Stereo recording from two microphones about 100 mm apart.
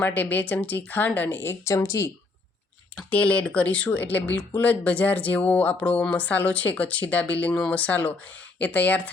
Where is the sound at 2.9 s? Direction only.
15° left (ahead or behind).